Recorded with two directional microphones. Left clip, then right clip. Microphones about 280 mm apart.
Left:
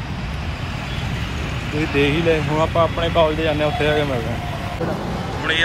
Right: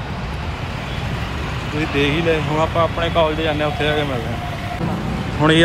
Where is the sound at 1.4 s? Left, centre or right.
Centre.